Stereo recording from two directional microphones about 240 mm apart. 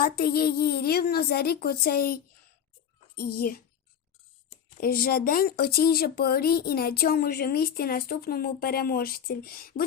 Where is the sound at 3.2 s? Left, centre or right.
Left.